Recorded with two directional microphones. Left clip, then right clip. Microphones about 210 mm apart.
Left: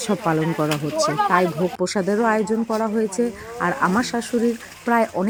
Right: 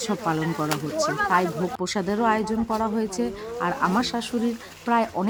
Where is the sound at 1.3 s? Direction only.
10° left (ahead or behind).